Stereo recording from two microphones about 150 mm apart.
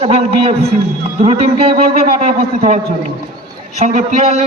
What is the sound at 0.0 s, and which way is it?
A man's voice, 40° right (ahead or behind).